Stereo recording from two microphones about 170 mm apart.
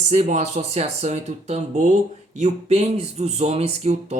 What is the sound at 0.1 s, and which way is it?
Speech, 40° right (ahead or behind).